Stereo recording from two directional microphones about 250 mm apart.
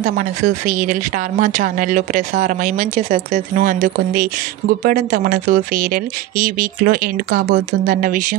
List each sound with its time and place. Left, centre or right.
0.0 s a woman's voice: right